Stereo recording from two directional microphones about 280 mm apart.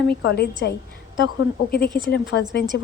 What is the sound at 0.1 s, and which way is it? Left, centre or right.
Speech, left.